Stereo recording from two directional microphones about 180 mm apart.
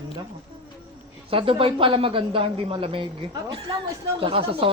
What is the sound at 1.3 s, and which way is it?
Speech, 30° right (ahead or behind).